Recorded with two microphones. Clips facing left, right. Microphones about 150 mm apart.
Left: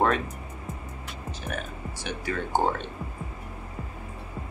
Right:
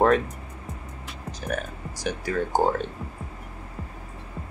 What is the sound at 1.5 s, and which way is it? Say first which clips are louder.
Speech: right 5 dB; 40° right (ahead or behind).